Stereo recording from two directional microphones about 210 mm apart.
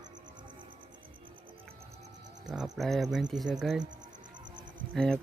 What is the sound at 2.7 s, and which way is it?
Speech, centre (ahead or behind).